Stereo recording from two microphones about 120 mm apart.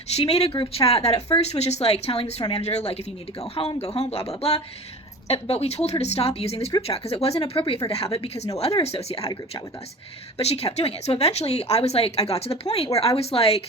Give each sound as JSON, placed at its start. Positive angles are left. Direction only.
{"t": 0.2, "sound": "speech", "side_deg": 55}
{"t": 10.3, "sound": "speech", "side_deg": 55}